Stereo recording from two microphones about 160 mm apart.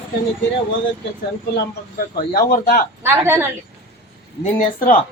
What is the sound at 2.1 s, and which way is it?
Speech, 65° left (ahead or behind).